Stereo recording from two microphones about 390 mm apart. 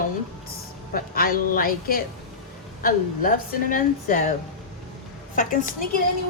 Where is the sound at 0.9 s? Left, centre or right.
Left.